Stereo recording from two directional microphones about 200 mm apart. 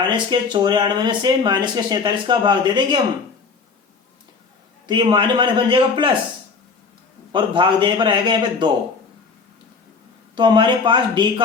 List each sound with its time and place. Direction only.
0.3 s speech: 20° right (ahead or behind)
4.9 s speech: 20° right (ahead or behind)
7.3 s speech: 25° right (ahead or behind)
10.3 s speech: 20° right (ahead or behind)